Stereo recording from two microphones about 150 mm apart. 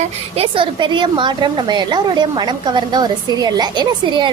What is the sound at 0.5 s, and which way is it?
A woman's voice, 30° right (ahead or behind).